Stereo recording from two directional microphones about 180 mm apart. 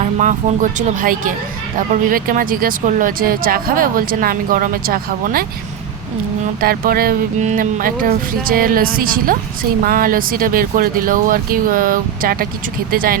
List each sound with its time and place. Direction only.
0.0 s speech: 45° right (ahead or behind)
6.6 s speech: 55° right (ahead or behind)